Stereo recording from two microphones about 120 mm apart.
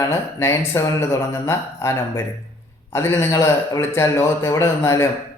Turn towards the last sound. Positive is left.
turn(degrees=20)  # may be behind; listen again after turning